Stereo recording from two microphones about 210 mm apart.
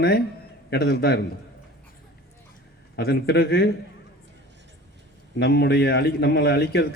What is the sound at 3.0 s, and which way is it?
Speech, 50° left (ahead or behind).